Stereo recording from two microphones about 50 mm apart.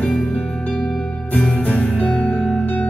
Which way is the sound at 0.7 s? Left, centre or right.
Centre.